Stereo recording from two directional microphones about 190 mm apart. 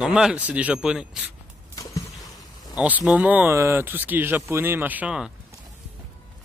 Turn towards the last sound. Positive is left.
turn(degrees=-5)  # may be behind; listen again after turning